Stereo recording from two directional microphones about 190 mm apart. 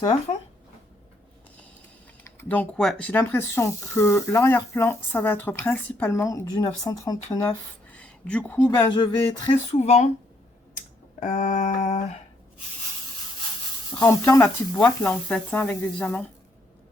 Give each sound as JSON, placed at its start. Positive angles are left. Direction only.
{"t": 0.0, "sound": "speech", "side_deg": 25}
{"t": 2.2, "sound": "speech", "side_deg": 10}
{"t": 7.9, "sound": "speech", "side_deg": 5}
{"t": 9.7, "sound": "speech", "side_deg": 35}
{"t": 10.8, "sound": "a sound", "side_deg": 45}
{"t": 13.9, "sound": "speech", "side_deg": 20}